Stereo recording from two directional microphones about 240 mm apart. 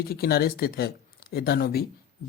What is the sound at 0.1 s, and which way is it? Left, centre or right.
Speech, left.